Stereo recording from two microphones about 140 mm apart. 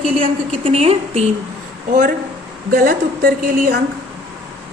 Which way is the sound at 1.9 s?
75° right (ahead or behind).